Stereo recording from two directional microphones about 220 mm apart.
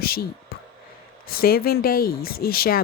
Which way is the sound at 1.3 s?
45° left (ahead or behind).